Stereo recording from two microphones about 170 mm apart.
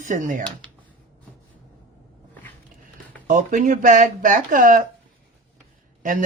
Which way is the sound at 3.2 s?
50° right (ahead or behind).